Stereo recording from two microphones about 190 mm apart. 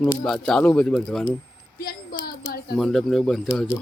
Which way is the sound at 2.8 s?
5° left (ahead or behind).